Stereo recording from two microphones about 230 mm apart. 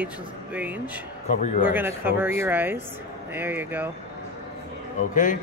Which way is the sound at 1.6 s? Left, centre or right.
Centre.